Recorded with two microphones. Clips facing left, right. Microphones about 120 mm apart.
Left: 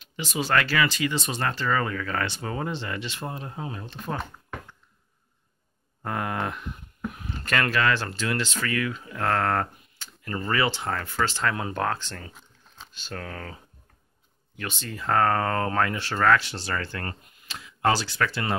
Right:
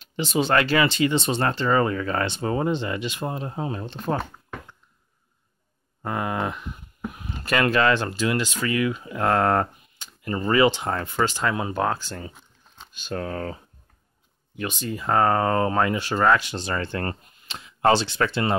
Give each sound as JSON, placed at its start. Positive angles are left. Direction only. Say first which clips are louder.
{"t": 0.0, "sound": "speech", "louder": "right 6 dB", "side_deg": -30}
{"t": 6.0, "sound": "a sound", "louder": "right 3 dB", "side_deg": -5}
{"t": 7.7, "sound": "speech", "louder": "right 4 dB", "side_deg": -20}
{"t": 14.6, "sound": "speech", "louder": "right 5 dB", "side_deg": -15}